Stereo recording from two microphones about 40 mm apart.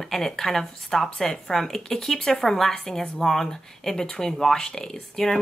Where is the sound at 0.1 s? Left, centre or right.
Centre.